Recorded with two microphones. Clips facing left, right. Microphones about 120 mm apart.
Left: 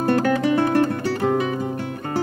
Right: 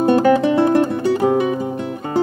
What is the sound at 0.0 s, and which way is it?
Music, 20° right (ahead or behind).